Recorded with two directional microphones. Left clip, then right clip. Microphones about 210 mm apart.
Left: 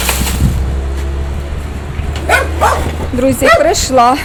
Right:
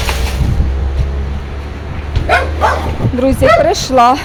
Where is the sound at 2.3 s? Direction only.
50° left (ahead or behind).